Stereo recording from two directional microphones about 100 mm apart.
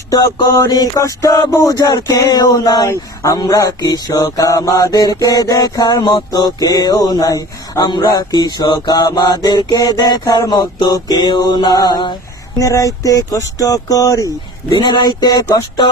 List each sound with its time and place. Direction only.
0.1 s a man's voice: 35° left (ahead or behind)
12.5 s a man's voice: 35° left (ahead or behind)
14.8 s a sound: 45° left (ahead or behind)